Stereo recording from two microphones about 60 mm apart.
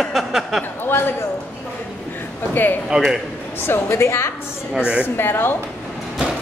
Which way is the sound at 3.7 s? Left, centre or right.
Left.